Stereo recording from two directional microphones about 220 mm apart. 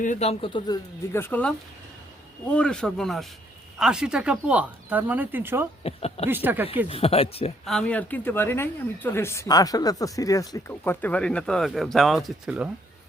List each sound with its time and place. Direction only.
0.0 s speech: 30° left (ahead or behind)
1.1 s speech: 10° left (ahead or behind); by 5.6 s 10° right (ahead or behind)
5.8 s speech: 30° left (ahead or behind)
6.2 s speech: 10° right (ahead or behind)
6.8 s speech: 25° left (ahead or behind)
7.6 s speech: centre (ahead or behind)